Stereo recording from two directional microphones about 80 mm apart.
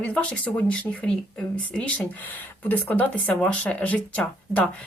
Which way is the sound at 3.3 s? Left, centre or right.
Centre.